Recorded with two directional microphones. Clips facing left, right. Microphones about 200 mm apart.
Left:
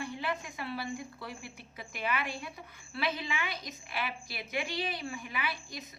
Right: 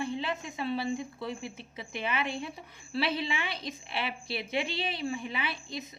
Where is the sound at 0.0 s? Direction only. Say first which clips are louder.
Right 3 dB; 25° right (ahead or behind).